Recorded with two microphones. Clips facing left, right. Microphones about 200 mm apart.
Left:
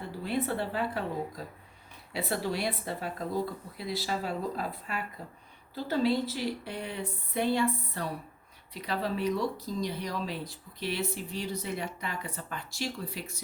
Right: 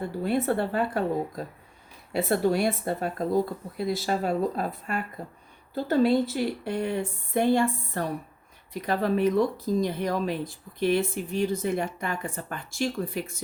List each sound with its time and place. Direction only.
0.3 s speech: 50° right (ahead or behind)
2.1 s speech: 50° right (ahead or behind)